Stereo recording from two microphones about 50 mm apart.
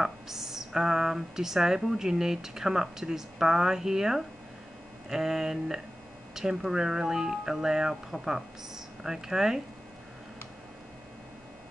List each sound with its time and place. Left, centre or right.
0.0 s speech: centre